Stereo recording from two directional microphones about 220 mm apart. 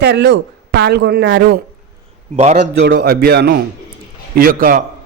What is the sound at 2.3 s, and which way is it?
Speech, 30° right (ahead or behind).